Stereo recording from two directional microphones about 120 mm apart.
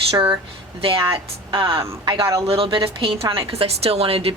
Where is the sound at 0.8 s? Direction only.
50° right (ahead or behind).